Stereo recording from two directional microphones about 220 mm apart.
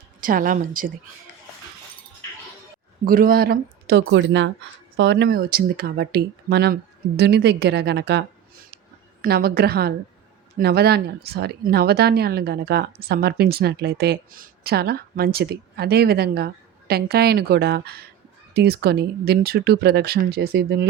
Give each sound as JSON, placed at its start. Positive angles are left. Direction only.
{"t": 0.2, "sound": "a woman's voice", "side_deg": -40}
{"t": 3.0, "sound": "a woman's voice", "side_deg": -40}